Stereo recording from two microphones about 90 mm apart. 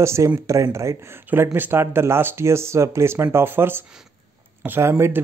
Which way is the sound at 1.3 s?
20° right (ahead or behind).